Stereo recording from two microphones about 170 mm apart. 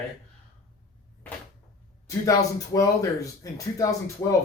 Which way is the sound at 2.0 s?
20° left (ahead or behind).